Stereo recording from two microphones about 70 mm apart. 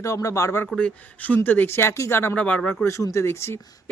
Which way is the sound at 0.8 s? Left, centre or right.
Left.